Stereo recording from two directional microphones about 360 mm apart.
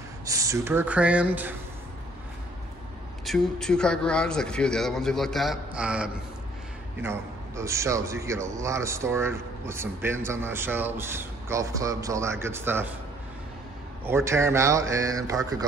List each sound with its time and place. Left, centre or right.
0.2 s a man's voice: centre
3.3 s a man's voice: centre
14.0 s a man's voice: centre